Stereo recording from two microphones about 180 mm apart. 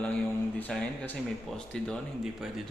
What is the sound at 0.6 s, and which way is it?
Speech, 10° left (ahead or behind).